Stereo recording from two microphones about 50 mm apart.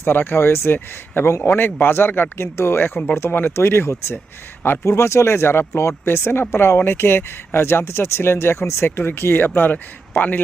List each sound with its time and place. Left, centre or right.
0.0 s speech: left
2.7 s speech: left
3.2 s speech: left
4.8 s speech: left
9.6 s speech: left